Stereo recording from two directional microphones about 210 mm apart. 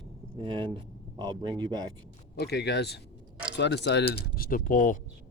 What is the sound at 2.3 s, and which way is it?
Speech, 50° left (ahead or behind).